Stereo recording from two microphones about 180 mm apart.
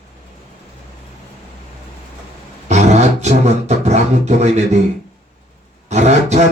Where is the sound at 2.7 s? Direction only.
40° right (ahead or behind).